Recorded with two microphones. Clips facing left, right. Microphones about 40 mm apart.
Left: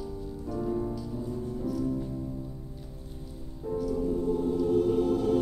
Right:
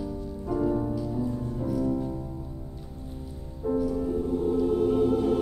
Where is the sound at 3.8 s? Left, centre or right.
Centre.